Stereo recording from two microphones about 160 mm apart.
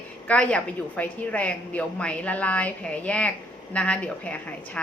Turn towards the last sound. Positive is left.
turn(degrees=10)  # may be behind; listen again after turning